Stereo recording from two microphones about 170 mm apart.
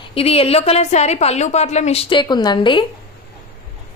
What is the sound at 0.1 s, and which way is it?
A woman's voice, 35° left (ahead or behind).